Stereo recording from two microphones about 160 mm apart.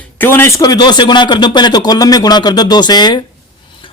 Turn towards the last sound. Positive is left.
turn(degrees=25)  # may be behind; listen again after turning